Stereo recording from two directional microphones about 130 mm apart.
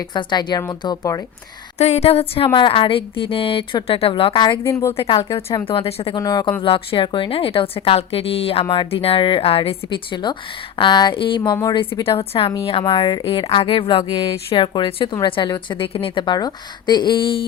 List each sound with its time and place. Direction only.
0.1 s a woman's voice: 35° left (ahead or behind)
1.8 s speech: 55° left (ahead or behind); by 4.6 s 40° left (ahead or behind)
4.6 s a woman's voice: 20° left (ahead or behind)
4.9 s speech: 45° left (ahead or behind)
5.3 s a woman's voice: 25° left (ahead or behind)
5.6 s speech: 45° left (ahead or behind)
6.1 s a woman's voice: 30° left (ahead or behind)
6.6 s a woman's voice: 40° left (ahead or behind)
13.4 s a woman's voice: 45° left (ahead or behind)